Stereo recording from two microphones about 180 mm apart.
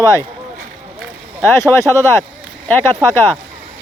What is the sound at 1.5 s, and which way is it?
Speech, 15° left (ahead or behind).